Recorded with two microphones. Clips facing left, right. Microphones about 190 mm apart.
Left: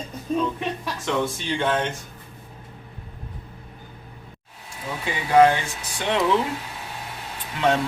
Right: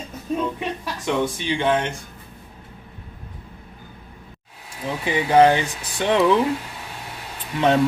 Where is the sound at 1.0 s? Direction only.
15° right (ahead or behind).